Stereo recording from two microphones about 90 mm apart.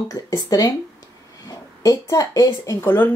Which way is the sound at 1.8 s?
40° left (ahead or behind).